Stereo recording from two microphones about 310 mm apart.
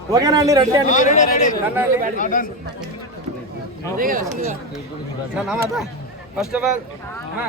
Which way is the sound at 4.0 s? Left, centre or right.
Right.